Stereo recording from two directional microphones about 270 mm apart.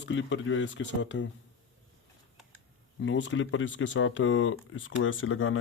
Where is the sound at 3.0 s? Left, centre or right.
Left.